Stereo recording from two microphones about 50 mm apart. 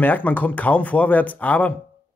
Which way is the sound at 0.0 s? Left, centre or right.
Left.